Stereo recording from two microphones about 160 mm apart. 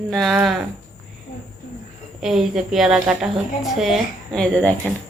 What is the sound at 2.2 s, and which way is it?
A woman's voice, centre (ahead or behind).